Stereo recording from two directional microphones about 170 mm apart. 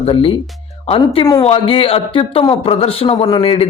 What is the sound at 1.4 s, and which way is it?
Speech, 35° left (ahead or behind).